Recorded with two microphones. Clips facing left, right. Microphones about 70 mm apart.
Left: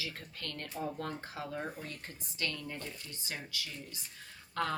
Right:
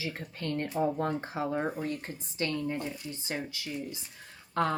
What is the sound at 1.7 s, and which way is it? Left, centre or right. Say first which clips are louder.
Speech: right 10 dB; right.